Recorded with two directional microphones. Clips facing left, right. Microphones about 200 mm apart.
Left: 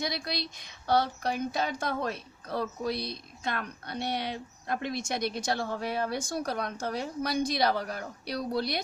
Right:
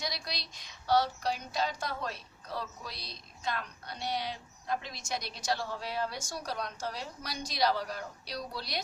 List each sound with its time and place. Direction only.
0.0 s speech: 55° left (ahead or behind)